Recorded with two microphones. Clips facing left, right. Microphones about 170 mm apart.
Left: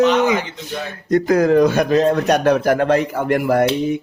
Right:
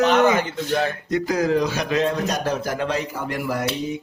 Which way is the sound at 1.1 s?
55° left (ahead or behind).